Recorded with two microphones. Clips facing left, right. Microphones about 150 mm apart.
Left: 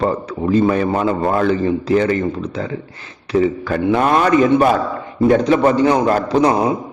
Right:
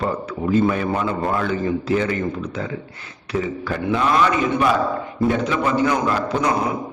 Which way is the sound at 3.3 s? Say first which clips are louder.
Left 7 dB; 45° left (ahead or behind).